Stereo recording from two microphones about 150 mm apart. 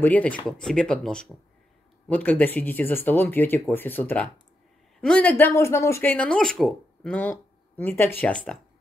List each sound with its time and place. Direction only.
0.0 s speech: 10° left (ahead or behind)